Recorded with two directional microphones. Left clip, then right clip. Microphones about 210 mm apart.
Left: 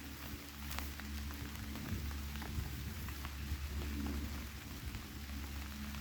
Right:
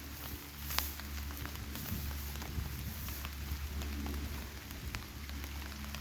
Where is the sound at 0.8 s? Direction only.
35° right (ahead or behind).